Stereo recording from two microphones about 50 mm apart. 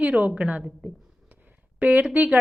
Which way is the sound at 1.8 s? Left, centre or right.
Right.